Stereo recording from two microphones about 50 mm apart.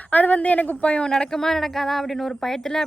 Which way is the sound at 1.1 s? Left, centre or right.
Centre.